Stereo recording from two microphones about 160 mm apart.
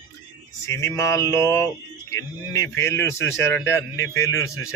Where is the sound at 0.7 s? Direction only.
20° left (ahead or behind).